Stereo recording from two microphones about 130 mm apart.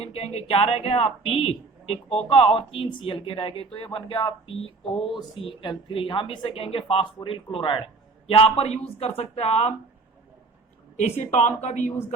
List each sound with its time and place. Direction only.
0.0 s speech: 50° left (ahead or behind)
10.9 s a woman's voice: 65° left (ahead or behind)